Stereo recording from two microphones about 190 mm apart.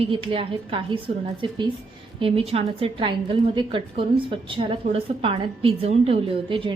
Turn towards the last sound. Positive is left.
turn(degrees=-25)  # may be behind; listen again after turning